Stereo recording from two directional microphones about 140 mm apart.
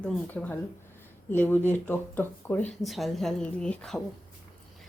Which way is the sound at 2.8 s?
Centre (ahead or behind).